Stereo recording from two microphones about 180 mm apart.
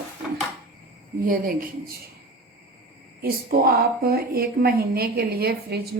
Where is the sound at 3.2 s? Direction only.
60° right (ahead or behind).